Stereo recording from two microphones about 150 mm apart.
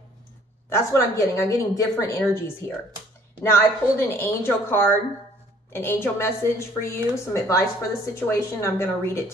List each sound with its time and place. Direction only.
0.7 s speech: 15° left (ahead or behind)
3.5 s a woman's voice: 15° left (ahead or behind)